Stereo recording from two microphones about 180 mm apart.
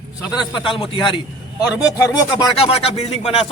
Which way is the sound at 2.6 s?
35° left (ahead or behind).